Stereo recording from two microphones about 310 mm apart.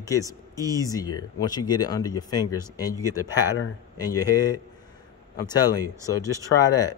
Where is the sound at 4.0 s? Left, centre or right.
Centre.